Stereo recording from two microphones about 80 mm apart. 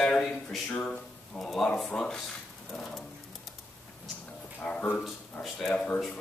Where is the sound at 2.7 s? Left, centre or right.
Centre.